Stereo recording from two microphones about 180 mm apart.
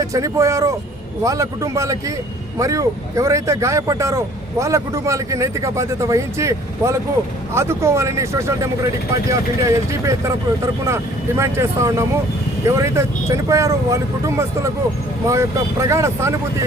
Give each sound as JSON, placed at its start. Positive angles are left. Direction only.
{"t": 0.0, "sound": "speech", "side_deg": -15}